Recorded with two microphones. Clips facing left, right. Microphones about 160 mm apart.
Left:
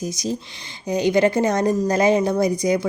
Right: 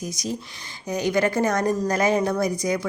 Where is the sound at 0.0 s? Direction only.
30° left (ahead or behind).